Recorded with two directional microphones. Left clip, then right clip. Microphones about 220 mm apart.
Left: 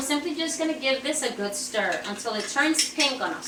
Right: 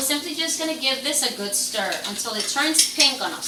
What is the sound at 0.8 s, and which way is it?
A woman's voice, centre (ahead or behind).